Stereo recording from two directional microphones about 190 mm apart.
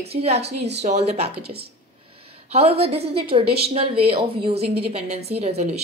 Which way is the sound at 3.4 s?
55° right (ahead or behind).